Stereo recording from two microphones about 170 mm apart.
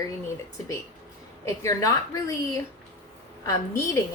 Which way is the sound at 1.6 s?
20° left (ahead or behind).